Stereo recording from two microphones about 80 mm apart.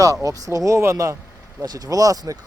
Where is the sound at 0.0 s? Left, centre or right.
Right.